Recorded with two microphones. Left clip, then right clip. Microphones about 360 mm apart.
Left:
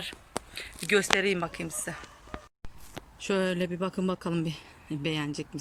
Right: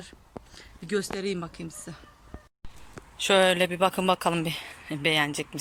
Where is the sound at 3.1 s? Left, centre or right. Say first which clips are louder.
Right 8 dB; centre.